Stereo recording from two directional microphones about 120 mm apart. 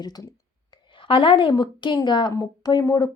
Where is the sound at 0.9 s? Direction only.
45° left (ahead or behind).